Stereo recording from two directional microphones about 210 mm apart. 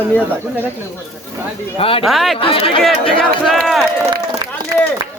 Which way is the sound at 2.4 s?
25° left (ahead or behind).